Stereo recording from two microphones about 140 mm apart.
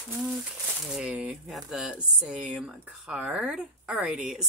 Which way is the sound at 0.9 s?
5° right (ahead or behind).